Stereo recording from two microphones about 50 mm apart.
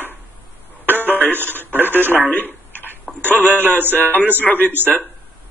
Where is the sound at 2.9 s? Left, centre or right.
Right.